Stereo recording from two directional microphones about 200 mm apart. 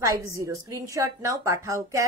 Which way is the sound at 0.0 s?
15° right (ahead or behind).